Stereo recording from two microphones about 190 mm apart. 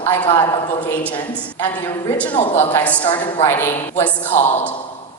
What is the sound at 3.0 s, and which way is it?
Speech, 25° left (ahead or behind).